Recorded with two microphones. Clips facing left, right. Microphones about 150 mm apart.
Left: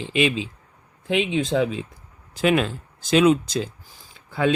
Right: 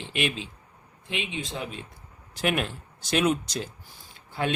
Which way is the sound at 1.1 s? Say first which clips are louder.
Left 12 dB; 90° left.